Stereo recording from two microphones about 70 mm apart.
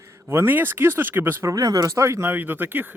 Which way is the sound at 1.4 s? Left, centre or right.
Right.